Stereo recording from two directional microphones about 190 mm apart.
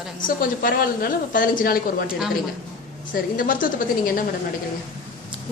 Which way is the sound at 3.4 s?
45° left (ahead or behind).